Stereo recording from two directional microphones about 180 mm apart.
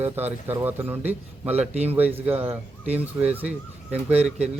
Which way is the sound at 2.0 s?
10° right (ahead or behind).